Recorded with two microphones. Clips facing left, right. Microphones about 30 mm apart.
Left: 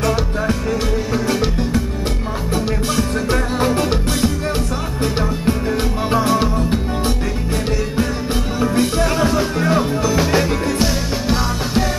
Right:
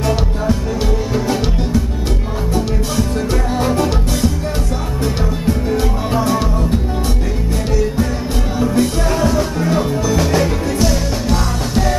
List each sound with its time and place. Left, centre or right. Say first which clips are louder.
1.1 s music: right 1 dB; centre
5.0 s music: even; centre
8.5 s music: right 1 dB; centre